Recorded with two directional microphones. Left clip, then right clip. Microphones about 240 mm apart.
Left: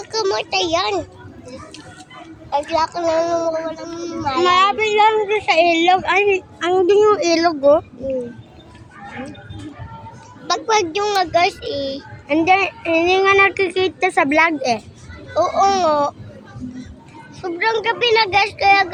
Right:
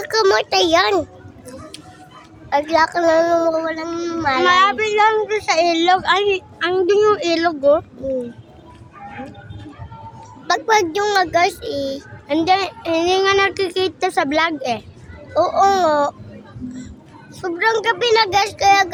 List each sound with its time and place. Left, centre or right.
0.0 s a child's voice: right
2.5 s a woman's voice: right
4.4 s speech: centre
5.5 s a woman's voice: right
6.0 s speech: centre
10.4 s a child's voice: centre
12.5 s speech: centre
15.4 s a child's voice: centre
17.4 s a child's voice: centre